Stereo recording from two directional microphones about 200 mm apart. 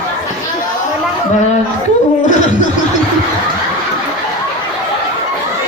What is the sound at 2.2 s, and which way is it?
Chuckle, 40° left (ahead or behind).